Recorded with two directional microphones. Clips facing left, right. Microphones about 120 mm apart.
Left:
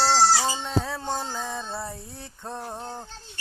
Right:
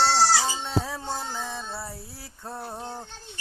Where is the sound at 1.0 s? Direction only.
25° left (ahead or behind).